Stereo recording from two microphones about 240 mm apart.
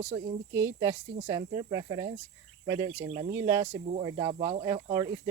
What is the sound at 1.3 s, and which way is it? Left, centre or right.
Speech, centre.